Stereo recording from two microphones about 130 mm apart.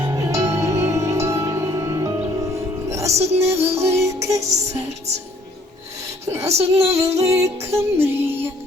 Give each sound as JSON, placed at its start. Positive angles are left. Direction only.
{"t": 0.0, "sound": "music", "side_deg": -25}
{"t": 3.2, "sound": "music", "side_deg": -55}
{"t": 3.5, "sound": "music", "side_deg": -20}
{"t": 6.2, "sound": "speech", "side_deg": -20}
{"t": 6.5, "sound": "music", "side_deg": -55}
{"t": 7.2, "sound": "music", "side_deg": -25}